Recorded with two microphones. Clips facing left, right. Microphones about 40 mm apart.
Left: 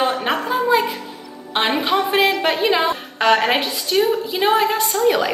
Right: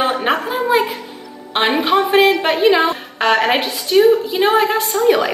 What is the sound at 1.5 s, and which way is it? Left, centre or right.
A woman's voice, centre.